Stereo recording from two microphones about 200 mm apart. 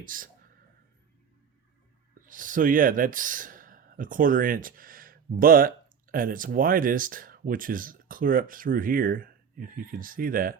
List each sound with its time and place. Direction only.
0.0 s speech: 45° right (ahead or behind)
2.2 s speech: 40° right (ahead or behind)